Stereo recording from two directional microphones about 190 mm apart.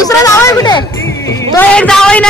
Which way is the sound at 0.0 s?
15° left (ahead or behind).